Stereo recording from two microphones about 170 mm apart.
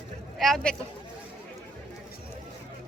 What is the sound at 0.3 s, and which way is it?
Speech, centre (ahead or behind).